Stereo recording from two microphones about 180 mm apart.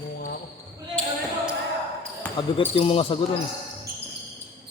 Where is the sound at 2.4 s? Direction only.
30° left (ahead or behind).